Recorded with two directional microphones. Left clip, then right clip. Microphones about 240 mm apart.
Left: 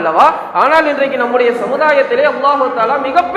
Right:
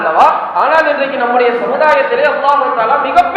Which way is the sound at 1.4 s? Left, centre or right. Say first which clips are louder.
Right 2 dB; left.